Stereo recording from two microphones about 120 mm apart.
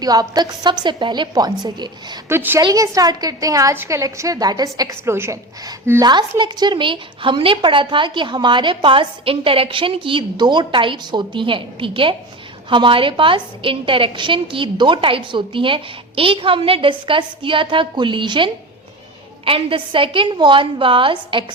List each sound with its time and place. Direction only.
0.0 s a woman's voice: 30° right (ahead or behind)
2.3 s a woman's voice: 15° right (ahead or behind)
2.6 s a woman's voice: 30° right (ahead or behind)
6.0 s a woman's voice: 35° right (ahead or behind)